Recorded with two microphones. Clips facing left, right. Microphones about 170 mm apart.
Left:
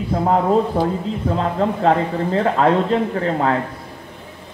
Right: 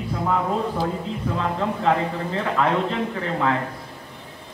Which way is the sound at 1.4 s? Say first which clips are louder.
Left 5 dB; 35° left (ahead or behind).